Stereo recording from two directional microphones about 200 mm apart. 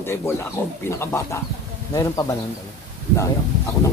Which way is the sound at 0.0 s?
10° left (ahead or behind).